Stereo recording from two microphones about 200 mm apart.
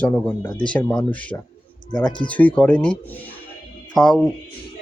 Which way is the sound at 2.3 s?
5° left (ahead or behind).